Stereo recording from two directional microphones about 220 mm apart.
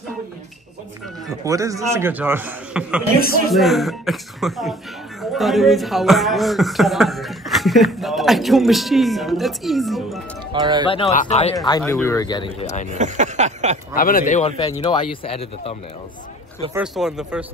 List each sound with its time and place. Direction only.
1.4 s a man's voice: 15° right (ahead or behind)
10.5 s speech: 20° right (ahead or behind)
10.9 s speech: 25° left (ahead or behind)
11.5 s speech: 15° left (ahead or behind)
12.9 s a sound: 35° right (ahead or behind)
13.9 s speech: 40° left (ahead or behind)
16.7 s speech: 5° right (ahead or behind)